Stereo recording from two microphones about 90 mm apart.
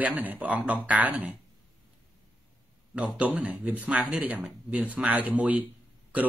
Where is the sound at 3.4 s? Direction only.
15° right (ahead or behind).